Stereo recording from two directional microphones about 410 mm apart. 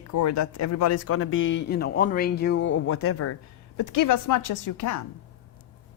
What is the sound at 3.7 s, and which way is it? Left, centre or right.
A woman's voice, left.